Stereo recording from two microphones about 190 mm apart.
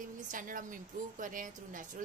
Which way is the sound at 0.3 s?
45° right (ahead or behind).